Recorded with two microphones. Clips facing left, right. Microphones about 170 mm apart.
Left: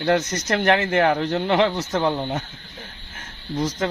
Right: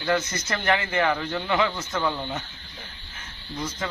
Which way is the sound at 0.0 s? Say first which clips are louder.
Left 5 dB; 45° left (ahead or behind).